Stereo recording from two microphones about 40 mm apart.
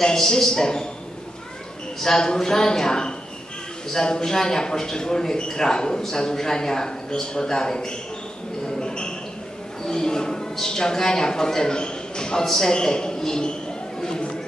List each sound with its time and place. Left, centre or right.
0.0 s speech: centre
2.0 s speech: centre
8.6 s a sound: centre
9.8 s speech: centre
14.0 s chatter: centre